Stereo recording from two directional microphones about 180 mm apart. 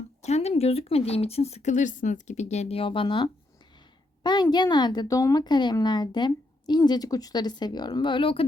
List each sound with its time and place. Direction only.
0.2 s a woman's voice: 35° left (ahead or behind)